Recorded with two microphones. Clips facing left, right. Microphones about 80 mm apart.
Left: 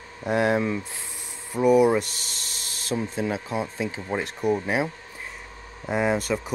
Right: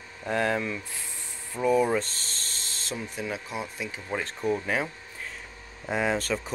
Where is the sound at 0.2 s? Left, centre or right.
Centre.